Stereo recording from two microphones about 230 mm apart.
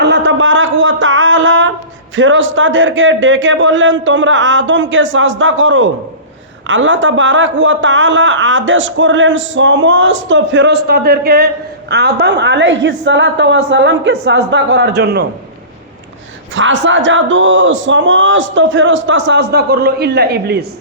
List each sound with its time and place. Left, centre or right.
0.0 s a sound: right
2.1 s a man's voice: right
16.6 s a man's voice: right